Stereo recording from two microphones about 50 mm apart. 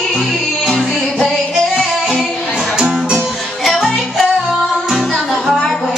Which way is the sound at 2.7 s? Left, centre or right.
Centre.